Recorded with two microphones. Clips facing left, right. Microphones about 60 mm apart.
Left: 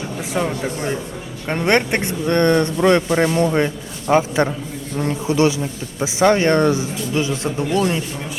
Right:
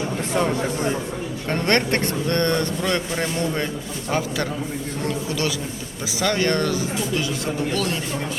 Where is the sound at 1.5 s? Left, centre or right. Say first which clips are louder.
Left 3 dB; centre.